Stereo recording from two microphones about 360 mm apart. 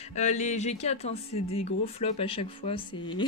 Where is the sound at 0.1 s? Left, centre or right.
Centre.